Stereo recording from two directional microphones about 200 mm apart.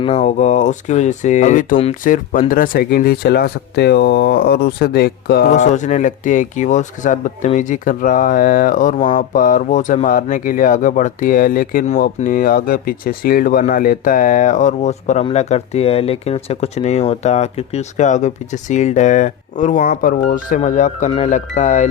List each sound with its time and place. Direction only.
0.0 s speech: 35° left (ahead or behind); by 5.5 s 50° left (ahead or behind)
5.5 s speech: 35° left (ahead or behind)